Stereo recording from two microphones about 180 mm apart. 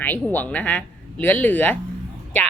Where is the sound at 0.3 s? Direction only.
10° left (ahead or behind).